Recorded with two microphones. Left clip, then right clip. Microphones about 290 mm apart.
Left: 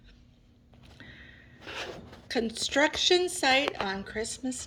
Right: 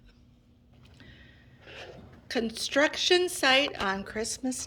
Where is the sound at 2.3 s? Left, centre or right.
Centre.